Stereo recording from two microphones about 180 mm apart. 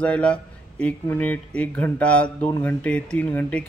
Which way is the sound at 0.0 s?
5° left (ahead or behind).